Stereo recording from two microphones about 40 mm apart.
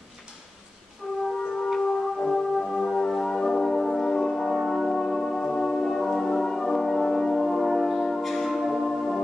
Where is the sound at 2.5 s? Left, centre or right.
Centre.